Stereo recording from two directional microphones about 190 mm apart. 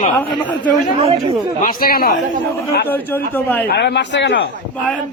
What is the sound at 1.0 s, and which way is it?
Speech, 30° right (ahead or behind).